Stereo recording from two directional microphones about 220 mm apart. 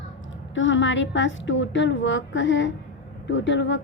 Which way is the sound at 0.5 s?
60° left (ahead or behind).